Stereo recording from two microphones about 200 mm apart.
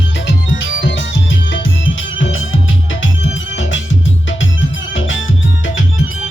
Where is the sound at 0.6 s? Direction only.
70° left (ahead or behind).